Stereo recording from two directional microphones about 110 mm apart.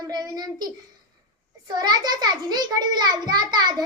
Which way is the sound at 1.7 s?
40° right (ahead or behind).